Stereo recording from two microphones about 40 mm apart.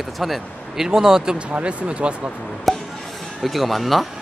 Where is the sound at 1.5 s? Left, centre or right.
Right.